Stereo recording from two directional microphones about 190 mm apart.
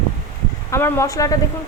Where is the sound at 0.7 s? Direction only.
15° left (ahead or behind).